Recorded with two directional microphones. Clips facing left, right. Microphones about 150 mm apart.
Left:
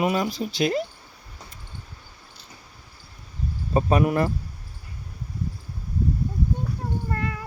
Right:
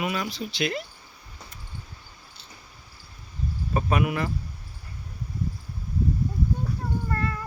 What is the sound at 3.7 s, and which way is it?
Speech, 35° left (ahead or behind).